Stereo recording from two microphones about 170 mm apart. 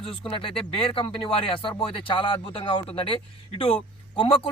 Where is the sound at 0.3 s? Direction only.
30° left (ahead or behind).